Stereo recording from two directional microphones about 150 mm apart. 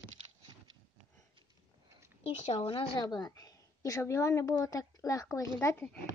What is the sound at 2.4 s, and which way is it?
A woman's voice, 45° left (ahead or behind).